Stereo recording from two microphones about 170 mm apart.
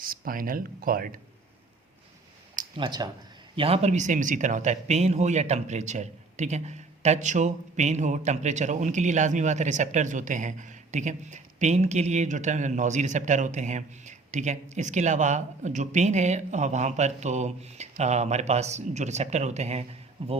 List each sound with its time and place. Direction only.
0.0 s speech: 55° right (ahead or behind)
2.7 s speech: 25° right (ahead or behind)